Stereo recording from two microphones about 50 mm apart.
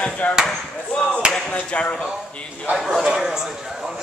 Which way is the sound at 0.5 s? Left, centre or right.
Centre.